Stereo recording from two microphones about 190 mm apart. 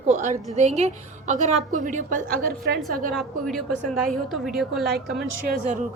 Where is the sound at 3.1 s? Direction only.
Centre (ahead or behind).